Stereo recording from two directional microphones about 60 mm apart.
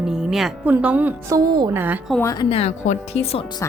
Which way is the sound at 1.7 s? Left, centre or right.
Right.